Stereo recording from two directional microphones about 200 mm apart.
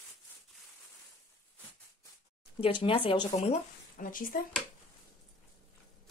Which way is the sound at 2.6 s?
25° left (ahead or behind).